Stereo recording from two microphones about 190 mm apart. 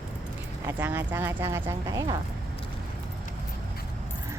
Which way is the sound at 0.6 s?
10° right (ahead or behind).